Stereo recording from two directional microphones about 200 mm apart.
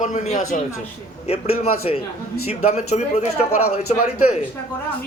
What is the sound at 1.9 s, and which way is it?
A man's voice, 30° left (ahead or behind).